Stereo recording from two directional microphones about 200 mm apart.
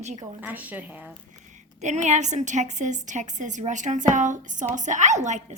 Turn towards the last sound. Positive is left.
turn(degrees=-35)  # may be behind; listen again after turning